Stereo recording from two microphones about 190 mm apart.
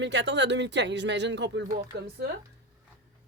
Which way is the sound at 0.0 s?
70° right (ahead or behind).